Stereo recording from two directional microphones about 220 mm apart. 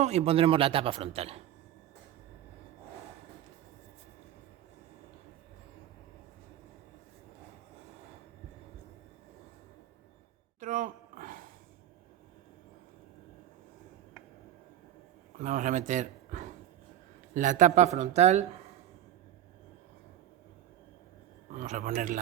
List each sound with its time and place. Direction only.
0.0 s a man's voice: 30° right (ahead or behind)
10.6 s a sound: 35° right (ahead or behind)
15.4 s speech: 35° right (ahead or behind)
21.5 s speech: 35° right (ahead or behind)